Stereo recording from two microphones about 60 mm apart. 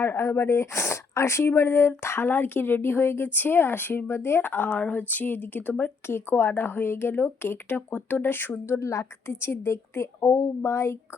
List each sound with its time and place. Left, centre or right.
0.0 s speech: left
6.1 s speech: left
8.8 s a woman's voice: left
9.3 s speech: left